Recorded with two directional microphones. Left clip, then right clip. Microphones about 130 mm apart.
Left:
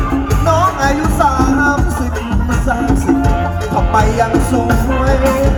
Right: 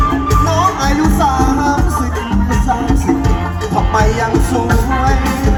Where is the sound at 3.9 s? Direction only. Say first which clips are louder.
Left 2 dB; 50° left (ahead or behind).